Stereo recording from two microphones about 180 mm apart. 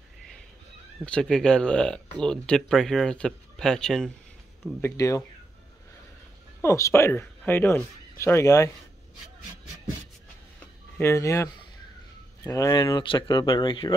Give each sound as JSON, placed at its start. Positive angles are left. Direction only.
{"t": 1.0, "sound": "speech", "side_deg": 5}
{"t": 4.8, "sound": "speech", "side_deg": 15}
{"t": 6.6, "sound": "speech", "side_deg": 15}
{"t": 11.0, "sound": "speech", "side_deg": 15}